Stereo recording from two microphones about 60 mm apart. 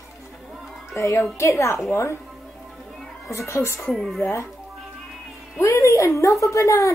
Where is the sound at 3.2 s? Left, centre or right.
Left.